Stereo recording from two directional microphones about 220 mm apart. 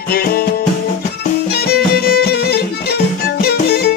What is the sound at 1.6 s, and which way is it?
Music, 45° left (ahead or behind).